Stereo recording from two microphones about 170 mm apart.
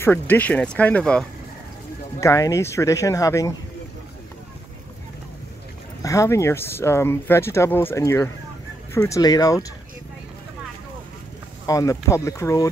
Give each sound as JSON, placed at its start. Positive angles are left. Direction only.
{"t": 0.0, "sound": "speech", "side_deg": 10}
{"t": 2.1, "sound": "speech", "side_deg": 20}
{"t": 6.0, "sound": "speech", "side_deg": 20}
{"t": 11.6, "sound": "speech", "side_deg": 20}